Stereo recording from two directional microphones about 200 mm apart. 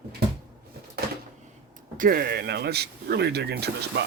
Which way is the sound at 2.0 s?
45° right (ahead or behind).